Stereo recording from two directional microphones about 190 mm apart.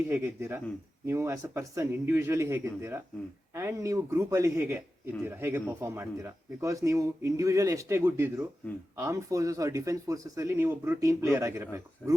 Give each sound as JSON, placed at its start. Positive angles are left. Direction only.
{"t": 0.1, "sound": "speech", "side_deg": -15}